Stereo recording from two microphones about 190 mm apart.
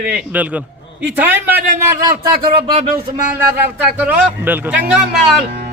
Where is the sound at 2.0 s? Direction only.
20° right (ahead or behind).